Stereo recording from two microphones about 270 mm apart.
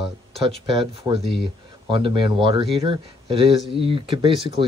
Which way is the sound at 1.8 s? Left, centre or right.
Centre.